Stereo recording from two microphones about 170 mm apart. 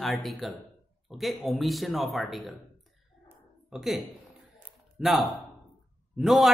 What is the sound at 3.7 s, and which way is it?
A man's voice, centre (ahead or behind).